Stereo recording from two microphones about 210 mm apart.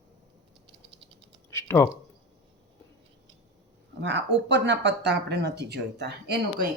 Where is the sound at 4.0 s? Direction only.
55° right (ahead or behind).